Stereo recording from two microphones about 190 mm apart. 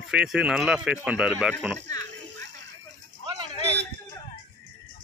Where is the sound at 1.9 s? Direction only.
15° left (ahead or behind).